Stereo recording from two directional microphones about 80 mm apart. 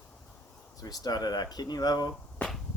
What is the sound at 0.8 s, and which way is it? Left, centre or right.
Speech, left.